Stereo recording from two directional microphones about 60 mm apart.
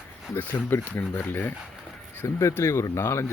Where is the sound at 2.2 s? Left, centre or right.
Left.